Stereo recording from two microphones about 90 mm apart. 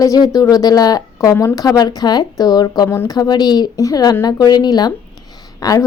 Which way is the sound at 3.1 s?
45° left (ahead or behind).